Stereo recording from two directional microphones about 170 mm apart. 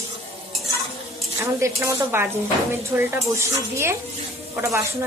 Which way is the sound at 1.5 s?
15° right (ahead or behind).